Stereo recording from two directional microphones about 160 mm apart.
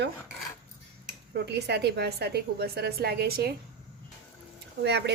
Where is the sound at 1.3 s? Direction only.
90° right; by 3.5 s 75° right (ahead or behind).